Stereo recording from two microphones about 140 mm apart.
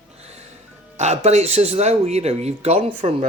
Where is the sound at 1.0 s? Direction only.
55° right (ahead or behind).